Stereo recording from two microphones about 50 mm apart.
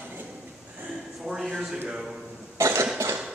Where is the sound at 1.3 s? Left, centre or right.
Centre.